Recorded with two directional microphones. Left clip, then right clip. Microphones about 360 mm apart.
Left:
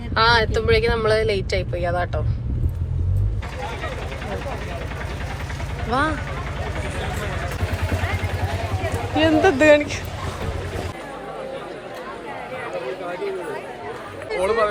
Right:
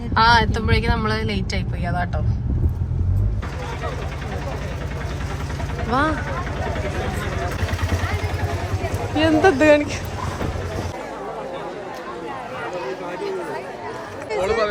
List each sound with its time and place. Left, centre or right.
0.1 s speech: centre
5.9 s speech: centre
9.2 s speech: centre
14.3 s a sound: centre